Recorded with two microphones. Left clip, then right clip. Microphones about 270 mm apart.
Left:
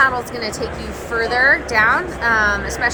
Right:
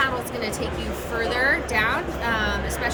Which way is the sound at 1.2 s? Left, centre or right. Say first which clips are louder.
Left 7 dB; centre.